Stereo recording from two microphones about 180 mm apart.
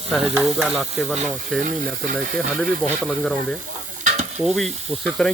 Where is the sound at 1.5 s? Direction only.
5° left (ahead or behind).